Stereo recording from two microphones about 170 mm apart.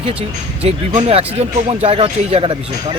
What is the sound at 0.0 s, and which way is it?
Speech, 35° right (ahead or behind).